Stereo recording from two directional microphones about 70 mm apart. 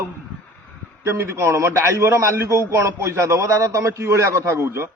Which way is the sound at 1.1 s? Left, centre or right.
Right.